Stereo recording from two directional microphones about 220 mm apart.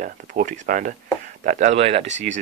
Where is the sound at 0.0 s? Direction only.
35° right (ahead or behind).